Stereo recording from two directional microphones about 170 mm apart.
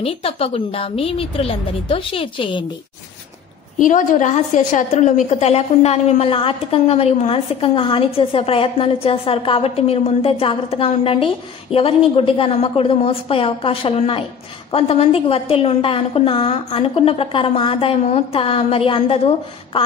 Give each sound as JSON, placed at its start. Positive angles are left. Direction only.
{"t": 0.0, "sound": "a woman's voice", "side_deg": 35}
{"t": 3.7, "sound": "a woman's voice", "side_deg": 50}